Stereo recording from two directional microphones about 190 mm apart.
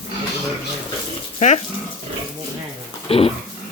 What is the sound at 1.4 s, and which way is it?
Speech, 35° left (ahead or behind).